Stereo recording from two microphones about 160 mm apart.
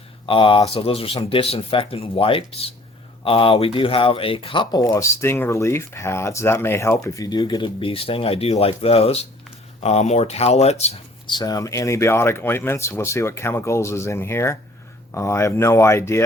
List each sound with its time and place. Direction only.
0.3 s speech: 35° left (ahead or behind)
11.3 s speech: 25° left (ahead or behind)